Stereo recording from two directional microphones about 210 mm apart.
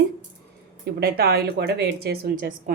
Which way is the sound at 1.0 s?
50° right (ahead or behind).